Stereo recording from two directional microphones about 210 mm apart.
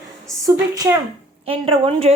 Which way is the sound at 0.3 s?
15° right (ahead or behind).